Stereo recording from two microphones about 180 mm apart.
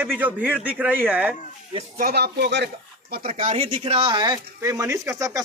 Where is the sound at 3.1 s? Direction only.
50° right (ahead or behind).